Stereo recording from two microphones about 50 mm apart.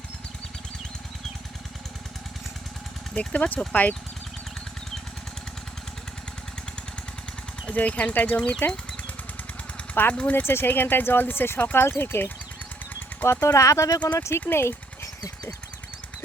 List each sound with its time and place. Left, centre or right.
3.2 s speech: left
7.7 s speech: left
8.4 s speech: centre
9.9 s speech: left
10.2 s speech: left
10.4 s speech: left
13.4 s speech: left
14.2 s speech: left
14.5 s speech: left